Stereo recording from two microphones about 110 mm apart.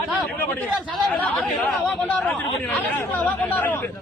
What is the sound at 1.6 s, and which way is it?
Speech, 10° left (ahead or behind).